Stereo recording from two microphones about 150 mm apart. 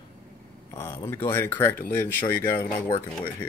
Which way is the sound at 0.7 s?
20° left (ahead or behind).